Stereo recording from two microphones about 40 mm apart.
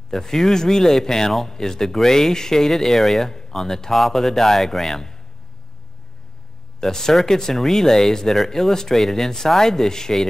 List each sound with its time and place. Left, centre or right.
0.1 s speech: centre
6.8 s speech: centre